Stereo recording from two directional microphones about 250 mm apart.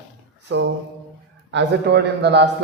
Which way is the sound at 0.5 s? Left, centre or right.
Right.